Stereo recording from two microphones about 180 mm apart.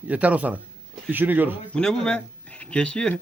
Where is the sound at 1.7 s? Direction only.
5° left (ahead or behind).